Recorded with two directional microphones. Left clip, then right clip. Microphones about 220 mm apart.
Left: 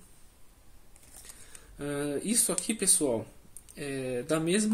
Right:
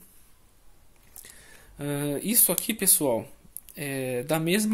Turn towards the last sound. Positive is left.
turn(degrees=-45)  # may be behind; listen again after turning